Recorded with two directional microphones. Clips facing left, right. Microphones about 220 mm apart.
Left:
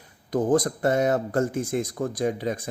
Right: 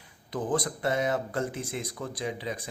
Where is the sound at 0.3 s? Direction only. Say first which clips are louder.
Left 8 dB; 45° left (ahead or behind).